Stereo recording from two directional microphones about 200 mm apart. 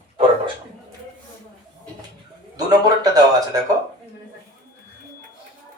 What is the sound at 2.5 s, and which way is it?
Speech, 20° right (ahead or behind).